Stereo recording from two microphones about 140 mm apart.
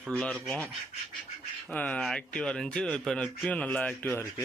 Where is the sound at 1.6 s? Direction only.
10° left (ahead or behind).